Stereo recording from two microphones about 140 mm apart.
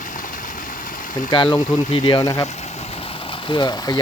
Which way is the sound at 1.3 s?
30° left (ahead or behind).